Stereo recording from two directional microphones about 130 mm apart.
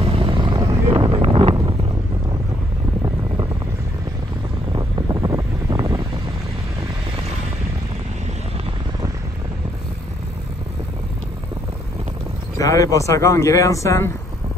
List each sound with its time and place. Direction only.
0.0 s vehicle: 45° right (ahead or behind)
0.6 s wind noise: 35° right (ahead or behind)
4.7 s wind: 35° right (ahead or behind)
12.5 s speech: 25° left (ahead or behind)